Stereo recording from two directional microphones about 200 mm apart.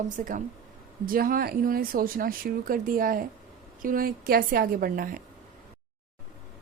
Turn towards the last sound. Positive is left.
turn(degrees=-45)  # may be behind; listen again after turning